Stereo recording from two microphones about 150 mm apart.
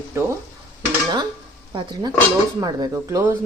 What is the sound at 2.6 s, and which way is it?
Speech, 25° right (ahead or behind).